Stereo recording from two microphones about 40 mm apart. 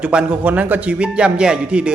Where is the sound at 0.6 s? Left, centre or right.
Right.